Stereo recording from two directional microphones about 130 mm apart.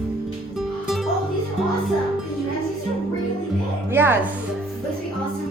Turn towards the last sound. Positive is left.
turn(degrees=-15)  # may be behind; listen again after turning